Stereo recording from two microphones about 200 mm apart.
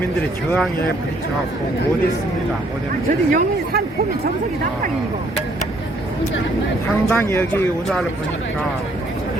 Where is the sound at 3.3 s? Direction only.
50° right (ahead or behind).